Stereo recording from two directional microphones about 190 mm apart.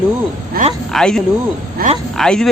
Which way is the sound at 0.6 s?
50° right (ahead or behind).